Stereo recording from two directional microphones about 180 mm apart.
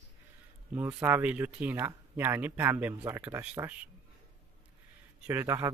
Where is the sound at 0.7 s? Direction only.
10° right (ahead or behind).